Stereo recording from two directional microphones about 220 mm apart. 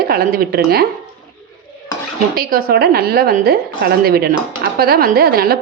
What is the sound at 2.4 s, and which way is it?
A woman's voice, 40° right (ahead or behind).